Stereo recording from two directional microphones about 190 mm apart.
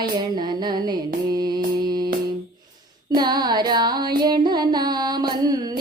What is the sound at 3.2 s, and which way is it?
Music, 20° right (ahead or behind).